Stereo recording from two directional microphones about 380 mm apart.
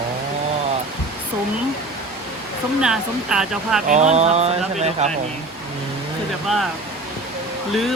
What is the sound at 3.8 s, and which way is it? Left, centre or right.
Speech, centre.